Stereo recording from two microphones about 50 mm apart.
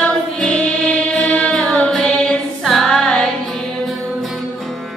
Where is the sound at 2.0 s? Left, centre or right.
Centre.